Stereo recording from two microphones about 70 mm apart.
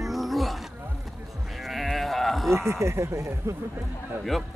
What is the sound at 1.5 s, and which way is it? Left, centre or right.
Sheep, centre.